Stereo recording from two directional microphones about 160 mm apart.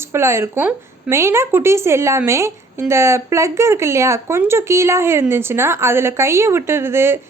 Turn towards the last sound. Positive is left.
turn(degrees=-15)  # may be behind; listen again after turning